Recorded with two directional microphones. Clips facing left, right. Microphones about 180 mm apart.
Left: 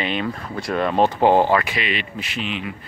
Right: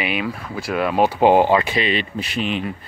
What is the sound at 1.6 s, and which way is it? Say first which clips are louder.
Speech: right 5 dB; 30° right (ahead or behind).